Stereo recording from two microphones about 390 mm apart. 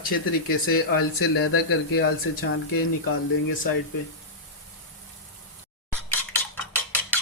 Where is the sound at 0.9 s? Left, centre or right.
Left.